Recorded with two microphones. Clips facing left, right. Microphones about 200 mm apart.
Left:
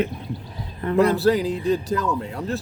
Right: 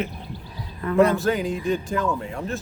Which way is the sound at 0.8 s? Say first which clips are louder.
Left 1 dB; 30° left (ahead or behind).